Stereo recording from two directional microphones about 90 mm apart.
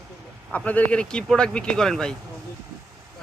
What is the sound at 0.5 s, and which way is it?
Speech, 15° left (ahead or behind).